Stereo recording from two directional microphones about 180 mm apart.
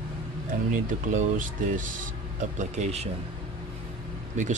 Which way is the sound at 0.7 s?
45° right (ahead or behind).